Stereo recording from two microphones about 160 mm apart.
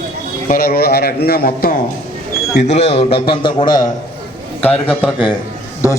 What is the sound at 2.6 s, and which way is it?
A man's voice, 45° left (ahead or behind).